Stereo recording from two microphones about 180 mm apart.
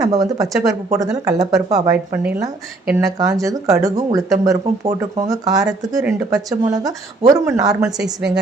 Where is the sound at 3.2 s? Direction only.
20° right (ahead or behind).